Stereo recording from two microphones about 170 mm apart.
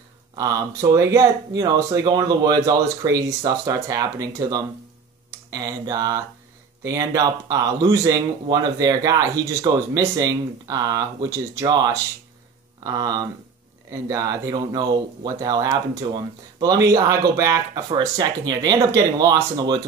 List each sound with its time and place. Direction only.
0.4 s speech: 20° right (ahead or behind)